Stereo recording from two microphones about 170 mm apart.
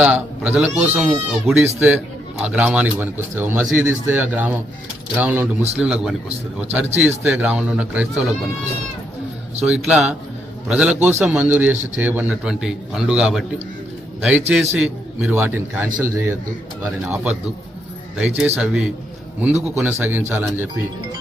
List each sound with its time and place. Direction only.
0.0 s a man's voice: 10° right (ahead or behind)
1.6 s a man's voice: 15° right (ahead or behind)
9.6 s a man's voice: 5° right (ahead or behind)
18.2 s a man's voice: 5° right (ahead or behind)